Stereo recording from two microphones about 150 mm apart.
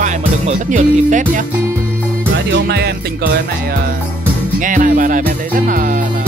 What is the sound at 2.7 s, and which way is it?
Music, 90° right.